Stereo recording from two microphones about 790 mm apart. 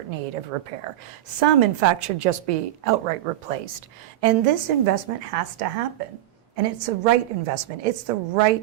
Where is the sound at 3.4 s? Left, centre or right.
Right.